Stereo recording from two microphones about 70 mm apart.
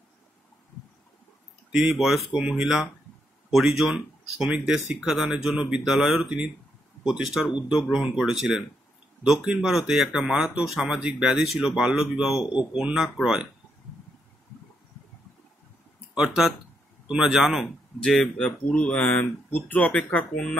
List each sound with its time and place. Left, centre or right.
1.7 s speech: centre
12.9 s speech: centre
16.2 s speech: centre
18.0 s speech: centre